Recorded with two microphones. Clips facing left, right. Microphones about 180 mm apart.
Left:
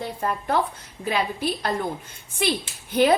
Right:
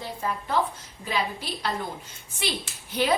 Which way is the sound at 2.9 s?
55° left (ahead or behind).